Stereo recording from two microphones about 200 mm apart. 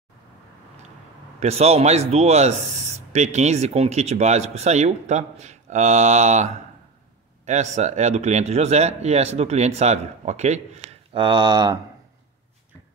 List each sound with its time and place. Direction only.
1.4 s speech: 30° right (ahead or behind)